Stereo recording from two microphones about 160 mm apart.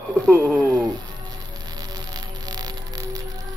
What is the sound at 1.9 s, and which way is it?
Music, 25° right (ahead or behind).